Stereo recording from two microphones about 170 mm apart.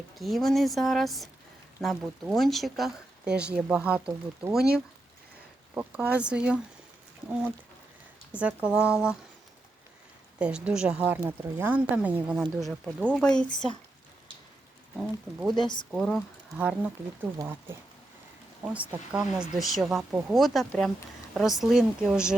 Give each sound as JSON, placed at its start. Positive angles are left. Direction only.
{"t": 0.2, "sound": "speech", "side_deg": 0}
{"t": 5.7, "sound": "speech", "side_deg": -10}
{"t": 8.4, "sound": "speech", "side_deg": -5}
{"t": 10.4, "sound": "speech", "side_deg": -5}
{"t": 14.9, "sound": "speech", "side_deg": 0}
{"t": 15.5, "sound": "speech", "side_deg": 25}
{"t": 15.9, "sound": "speech", "side_deg": 0}
{"t": 16.6, "sound": "speech", "side_deg": -10}